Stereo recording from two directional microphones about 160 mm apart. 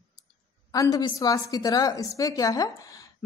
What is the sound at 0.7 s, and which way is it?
A woman's voice, 25° left (ahead or behind).